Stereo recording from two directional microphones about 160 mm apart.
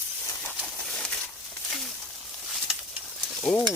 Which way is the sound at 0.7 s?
5° left (ahead or behind).